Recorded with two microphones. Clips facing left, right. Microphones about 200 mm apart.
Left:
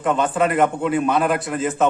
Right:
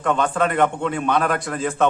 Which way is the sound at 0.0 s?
5° left (ahead or behind).